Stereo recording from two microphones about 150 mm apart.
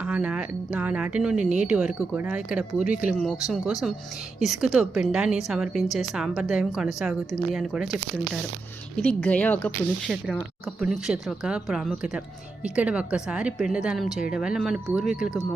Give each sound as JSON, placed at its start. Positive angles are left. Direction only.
{"t": 0.0, "sound": "a woman's voice", "side_deg": -5}
{"t": 9.0, "sound": "a woman's voice", "side_deg": 10}
{"t": 10.8, "sound": "a woman's voice", "side_deg": -5}